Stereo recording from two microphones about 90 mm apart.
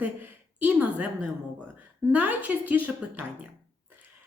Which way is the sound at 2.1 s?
20° right (ahead or behind).